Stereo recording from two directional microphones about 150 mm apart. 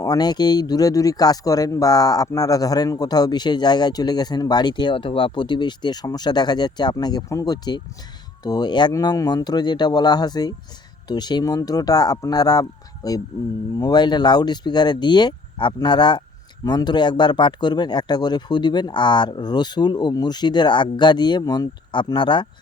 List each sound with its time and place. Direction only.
0.0 s speech: 25° left (ahead or behind)